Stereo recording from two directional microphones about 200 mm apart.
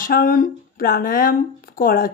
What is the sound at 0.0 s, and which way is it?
Speech, 45° left (ahead or behind).